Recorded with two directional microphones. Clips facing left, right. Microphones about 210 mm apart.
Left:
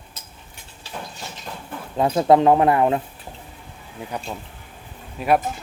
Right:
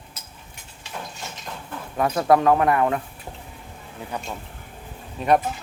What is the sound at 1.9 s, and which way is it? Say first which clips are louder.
Speech: left 3 dB; 25° left (ahead or behind).